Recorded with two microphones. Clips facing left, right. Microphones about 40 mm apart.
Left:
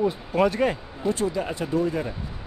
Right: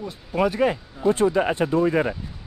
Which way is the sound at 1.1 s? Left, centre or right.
Right.